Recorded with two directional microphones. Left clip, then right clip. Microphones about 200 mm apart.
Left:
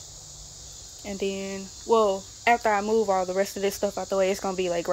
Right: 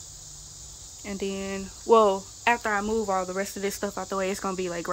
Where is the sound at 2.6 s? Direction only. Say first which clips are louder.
Left 4 dB; 35° right (ahead or behind).